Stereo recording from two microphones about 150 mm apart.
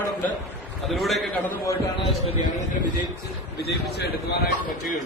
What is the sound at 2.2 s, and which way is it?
Speech, 40° left (ahead or behind).